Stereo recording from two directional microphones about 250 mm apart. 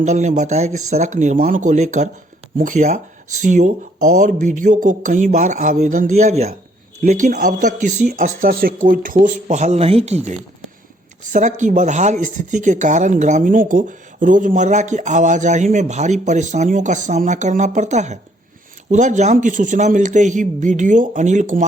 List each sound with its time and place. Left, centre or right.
0.0 s speech: right